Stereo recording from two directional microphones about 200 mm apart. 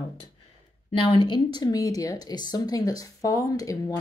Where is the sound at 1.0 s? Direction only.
25° left (ahead or behind).